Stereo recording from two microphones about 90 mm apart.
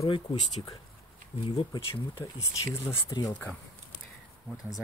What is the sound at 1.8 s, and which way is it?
Speech, 90° left.